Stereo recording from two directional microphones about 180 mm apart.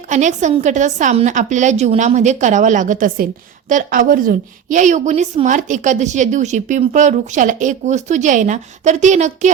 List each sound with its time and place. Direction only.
0.1 s a woman's voice: 40° right (ahead or behind)